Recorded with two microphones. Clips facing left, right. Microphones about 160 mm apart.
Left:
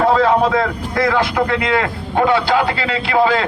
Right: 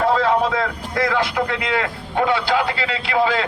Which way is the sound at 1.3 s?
65° left (ahead or behind).